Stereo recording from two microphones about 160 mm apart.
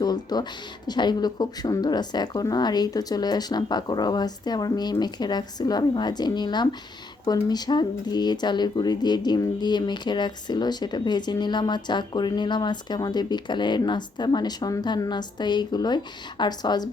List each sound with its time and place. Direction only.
0.0 s speech: 25° left (ahead or behind)